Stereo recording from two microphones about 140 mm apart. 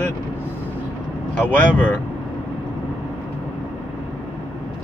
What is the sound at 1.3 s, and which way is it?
Speech, 10° left (ahead or behind).